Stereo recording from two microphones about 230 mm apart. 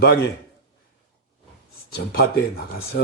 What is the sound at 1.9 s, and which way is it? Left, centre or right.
A man's voice, left.